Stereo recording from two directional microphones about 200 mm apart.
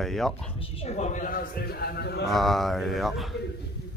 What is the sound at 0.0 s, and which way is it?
Speech, centre (ahead or behind).